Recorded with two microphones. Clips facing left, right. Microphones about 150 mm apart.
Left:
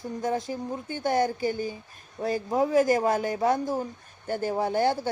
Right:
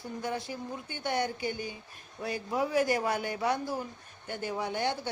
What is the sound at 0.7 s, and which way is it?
A man's voice, 35° left (ahead or behind).